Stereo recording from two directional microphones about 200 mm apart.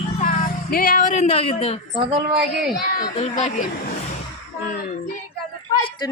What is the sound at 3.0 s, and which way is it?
Speech, 30° left (ahead or behind).